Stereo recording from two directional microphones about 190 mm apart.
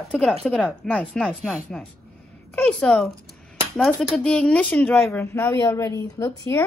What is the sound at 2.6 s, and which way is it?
A woman's voice, 5° left (ahead or behind).